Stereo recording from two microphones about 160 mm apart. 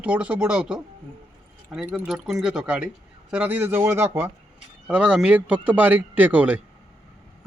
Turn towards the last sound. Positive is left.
turn(degrees=-10)  # may be behind; listen again after turning